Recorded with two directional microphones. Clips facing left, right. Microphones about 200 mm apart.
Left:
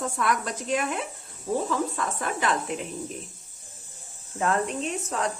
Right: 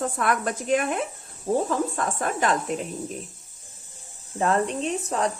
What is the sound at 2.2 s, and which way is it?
Speech, 45° right (ahead or behind).